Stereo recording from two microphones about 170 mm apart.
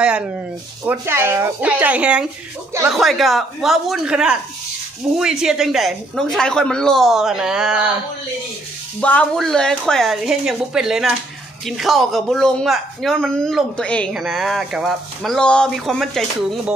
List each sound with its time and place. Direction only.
0.8 s speech: 15° right (ahead or behind)
9.0 s speech: 10° left (ahead or behind)